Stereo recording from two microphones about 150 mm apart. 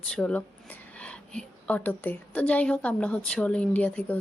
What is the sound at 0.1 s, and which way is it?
A woman's voice, 10° left (ahead or behind).